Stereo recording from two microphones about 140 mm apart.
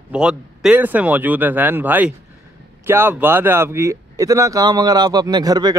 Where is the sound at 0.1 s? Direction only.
5° right (ahead or behind).